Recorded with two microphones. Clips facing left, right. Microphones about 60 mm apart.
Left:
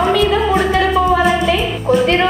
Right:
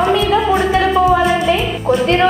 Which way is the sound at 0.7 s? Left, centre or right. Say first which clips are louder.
Right 3 dB; centre.